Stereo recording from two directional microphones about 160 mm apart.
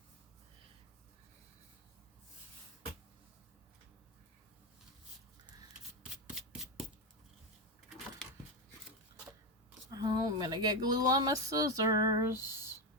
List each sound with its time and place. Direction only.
6.3 s shuffling cards: centre (ahead or behind)
8.2 s a sound: 5° left (ahead or behind)
9.9 s speech: 25° right (ahead or behind)